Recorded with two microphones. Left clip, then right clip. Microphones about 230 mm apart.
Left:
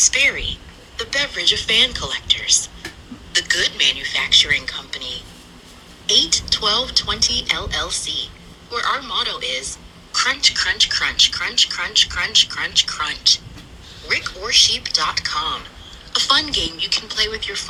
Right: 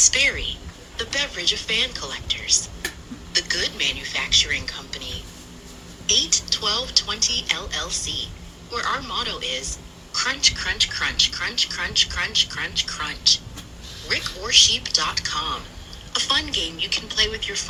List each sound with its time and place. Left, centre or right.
0.0 s a woman's voice: centre